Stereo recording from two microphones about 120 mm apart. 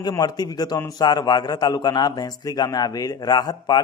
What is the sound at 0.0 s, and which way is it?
A man's voice, 35° left (ahead or behind).